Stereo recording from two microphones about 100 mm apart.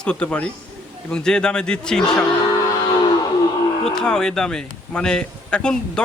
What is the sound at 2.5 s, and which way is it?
Music, 45° left (ahead or behind).